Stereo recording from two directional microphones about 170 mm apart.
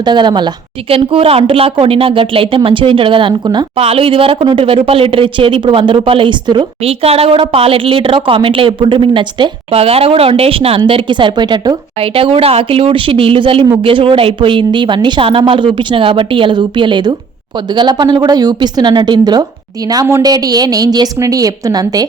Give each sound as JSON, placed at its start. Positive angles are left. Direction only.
{"t": 0.0, "sound": "a woman's voice", "side_deg": -25}